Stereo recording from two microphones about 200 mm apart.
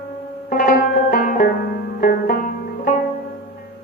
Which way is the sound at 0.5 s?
45° left (ahead or behind).